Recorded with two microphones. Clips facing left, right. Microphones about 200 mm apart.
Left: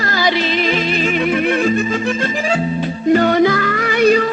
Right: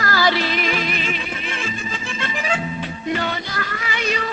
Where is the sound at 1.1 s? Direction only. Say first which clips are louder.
Left 14 dB; 60° left (ahead or behind).